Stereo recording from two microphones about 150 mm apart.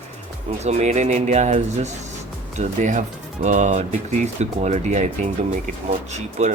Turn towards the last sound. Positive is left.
turn(degrees=-50)  # may be behind; listen again after turning